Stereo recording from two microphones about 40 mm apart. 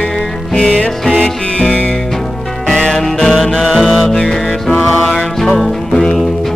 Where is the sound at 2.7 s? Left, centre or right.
Centre.